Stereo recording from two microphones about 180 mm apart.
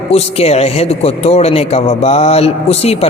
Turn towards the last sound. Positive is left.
turn(degrees=35)  # may be behind; listen again after turning